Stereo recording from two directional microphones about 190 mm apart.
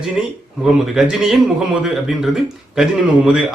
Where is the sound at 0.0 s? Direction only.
5° right (ahead or behind).